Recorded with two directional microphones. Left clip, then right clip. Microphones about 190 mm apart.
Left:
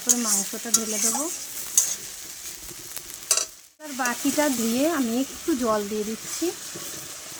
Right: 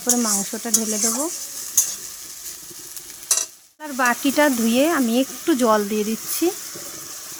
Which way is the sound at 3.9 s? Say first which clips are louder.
Right 6 dB; 45° right (ahead or behind).